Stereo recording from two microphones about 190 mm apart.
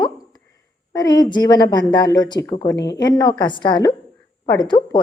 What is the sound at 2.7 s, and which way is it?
Speech, 65° left (ahead or behind).